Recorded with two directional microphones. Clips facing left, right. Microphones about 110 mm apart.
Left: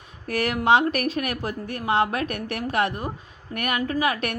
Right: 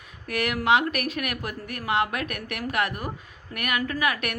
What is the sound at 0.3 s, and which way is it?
A woman's voice, 35° left (ahead or behind).